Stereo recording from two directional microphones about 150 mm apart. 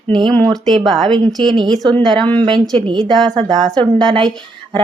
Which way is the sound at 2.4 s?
30° right (ahead or behind).